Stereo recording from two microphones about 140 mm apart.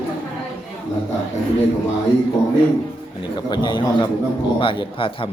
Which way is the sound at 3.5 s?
30° left (ahead or behind).